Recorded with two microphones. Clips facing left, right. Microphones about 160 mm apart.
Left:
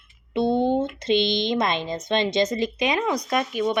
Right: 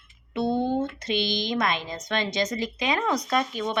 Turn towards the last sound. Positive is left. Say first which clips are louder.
# left 3 dB
turn(degrees=15)  # may be behind; listen again after turning